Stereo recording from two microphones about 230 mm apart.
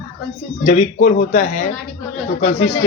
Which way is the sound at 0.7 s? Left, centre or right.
Left.